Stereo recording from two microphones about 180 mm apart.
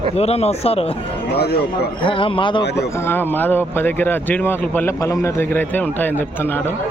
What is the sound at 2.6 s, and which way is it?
Speech, 70° left (ahead or behind).